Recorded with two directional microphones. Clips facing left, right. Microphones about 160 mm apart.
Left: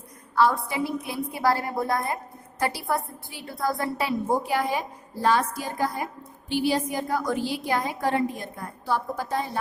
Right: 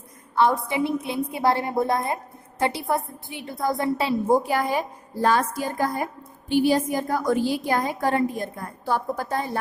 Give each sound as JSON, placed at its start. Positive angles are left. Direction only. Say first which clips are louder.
{"t": 0.3, "sound": "a woman's voice", "louder": "right 2 dB", "side_deg": -20}
{"t": 4.4, "sound": "a woman's voice", "louder": "right 2 dB", "side_deg": -45}